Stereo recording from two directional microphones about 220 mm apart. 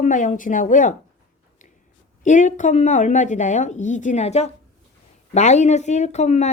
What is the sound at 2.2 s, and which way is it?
Speech, 35° left (ahead or behind).